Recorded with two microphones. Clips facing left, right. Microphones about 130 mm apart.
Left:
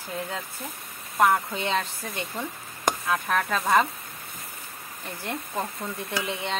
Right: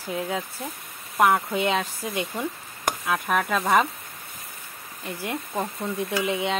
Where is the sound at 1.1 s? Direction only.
5° right (ahead or behind).